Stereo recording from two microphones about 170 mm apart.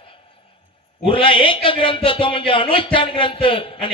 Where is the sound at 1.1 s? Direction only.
30° left (ahead or behind).